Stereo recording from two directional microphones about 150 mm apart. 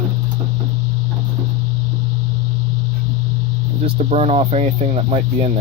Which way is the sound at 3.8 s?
45° right (ahead or behind).